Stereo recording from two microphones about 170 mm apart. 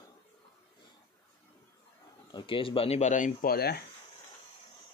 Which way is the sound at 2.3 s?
30° left (ahead or behind).